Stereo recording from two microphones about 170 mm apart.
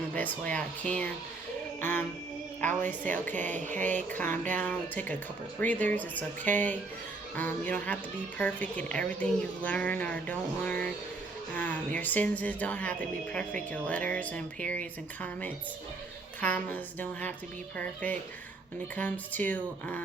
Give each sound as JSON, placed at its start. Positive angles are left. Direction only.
{"t": 0.1, "sound": "speech", "side_deg": 10}
{"t": 3.4, "sound": "a sound", "side_deg": -45}
{"t": 3.9, "sound": "speech", "side_deg": 10}